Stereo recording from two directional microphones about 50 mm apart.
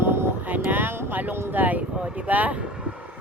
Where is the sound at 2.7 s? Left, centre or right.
Right.